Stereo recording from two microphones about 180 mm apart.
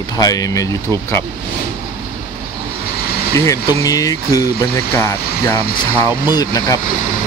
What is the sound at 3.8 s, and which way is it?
Speech, 20° left (ahead or behind).